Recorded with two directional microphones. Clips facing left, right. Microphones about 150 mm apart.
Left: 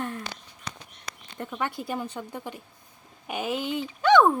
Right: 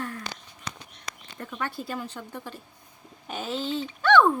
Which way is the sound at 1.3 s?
20° left (ahead or behind).